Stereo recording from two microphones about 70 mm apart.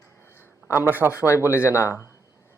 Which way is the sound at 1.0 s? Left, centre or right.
Left.